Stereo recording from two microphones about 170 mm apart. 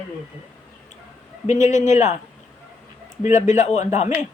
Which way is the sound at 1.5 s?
45° left (ahead or behind).